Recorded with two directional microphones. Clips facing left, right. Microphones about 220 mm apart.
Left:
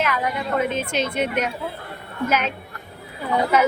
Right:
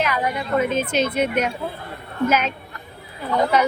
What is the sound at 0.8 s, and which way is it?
Speech, 40° right (ahead or behind).